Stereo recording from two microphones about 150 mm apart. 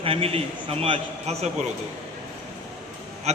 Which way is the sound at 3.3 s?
50° right (ahead or behind).